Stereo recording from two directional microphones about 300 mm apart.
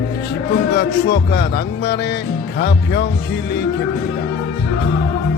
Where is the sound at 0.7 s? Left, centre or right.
Left.